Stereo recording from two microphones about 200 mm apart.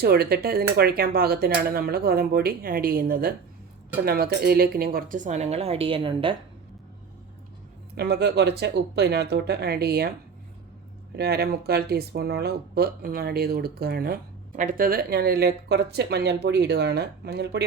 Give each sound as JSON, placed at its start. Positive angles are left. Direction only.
{"t": 0.0, "sound": "speech", "side_deg": -50}
{"t": 7.9, "sound": "speech", "side_deg": -55}
{"t": 11.2, "sound": "speech", "side_deg": -50}